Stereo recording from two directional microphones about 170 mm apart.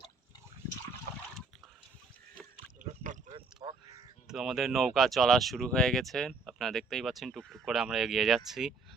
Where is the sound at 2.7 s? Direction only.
50° right (ahead or behind).